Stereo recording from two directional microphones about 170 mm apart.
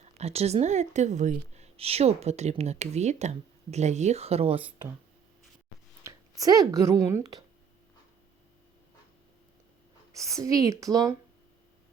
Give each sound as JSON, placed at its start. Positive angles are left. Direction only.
{"t": 0.0, "sound": "speech", "side_deg": -40}
{"t": 6.0, "sound": "speech", "side_deg": -20}
{"t": 10.1, "sound": "a woman's voice", "side_deg": -20}